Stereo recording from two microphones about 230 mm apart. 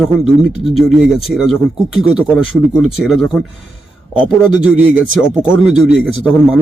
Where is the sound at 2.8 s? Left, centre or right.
Centre.